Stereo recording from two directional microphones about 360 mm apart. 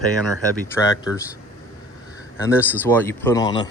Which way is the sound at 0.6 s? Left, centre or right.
Centre.